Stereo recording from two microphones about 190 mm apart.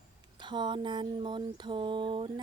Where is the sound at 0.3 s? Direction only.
25° right (ahead or behind).